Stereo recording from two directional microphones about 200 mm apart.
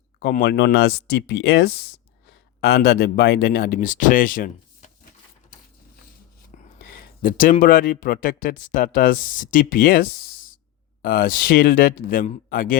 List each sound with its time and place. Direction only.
0.2 s speech: 50° left (ahead or behind)
6.7 s a sound: 45° left (ahead or behind)
7.6 s speech: 45° left (ahead or behind)